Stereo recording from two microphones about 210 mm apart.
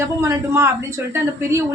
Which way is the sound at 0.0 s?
10° right (ahead or behind).